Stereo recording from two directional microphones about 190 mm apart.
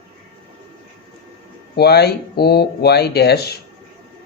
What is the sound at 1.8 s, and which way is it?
Speech, 60° left (ahead or behind).